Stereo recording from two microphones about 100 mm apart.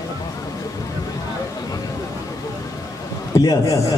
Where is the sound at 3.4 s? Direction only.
40° left (ahead or behind).